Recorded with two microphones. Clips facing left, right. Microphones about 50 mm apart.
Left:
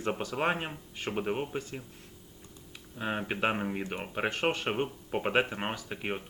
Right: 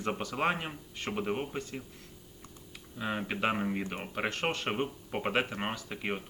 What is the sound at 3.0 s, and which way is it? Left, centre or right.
Speech, left.